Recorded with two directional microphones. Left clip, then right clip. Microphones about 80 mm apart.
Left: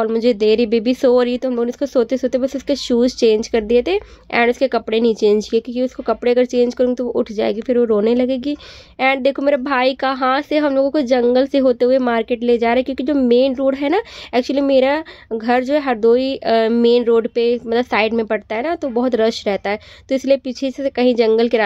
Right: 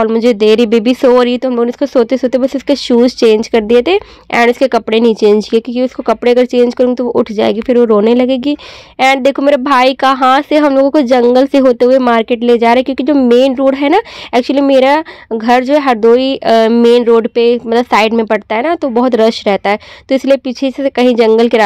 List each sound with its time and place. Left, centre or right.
0.0 s speech: right